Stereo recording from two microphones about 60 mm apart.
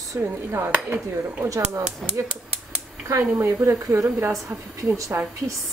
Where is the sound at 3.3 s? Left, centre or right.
Right.